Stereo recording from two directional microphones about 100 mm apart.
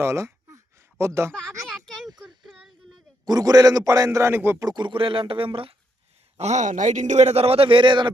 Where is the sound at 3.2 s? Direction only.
40° right (ahead or behind); by 4.5 s 25° right (ahead or behind).